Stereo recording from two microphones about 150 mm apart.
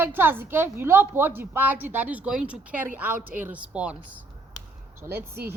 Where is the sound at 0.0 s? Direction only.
15° right (ahead or behind).